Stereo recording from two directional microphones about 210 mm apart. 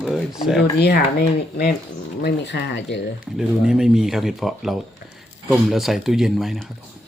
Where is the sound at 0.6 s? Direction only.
50° left (ahead or behind).